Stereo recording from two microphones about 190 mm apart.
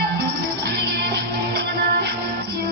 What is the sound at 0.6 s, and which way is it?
Music, 60° right (ahead or behind).